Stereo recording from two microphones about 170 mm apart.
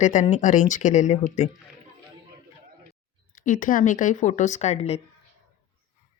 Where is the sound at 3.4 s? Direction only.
50° left (ahead or behind).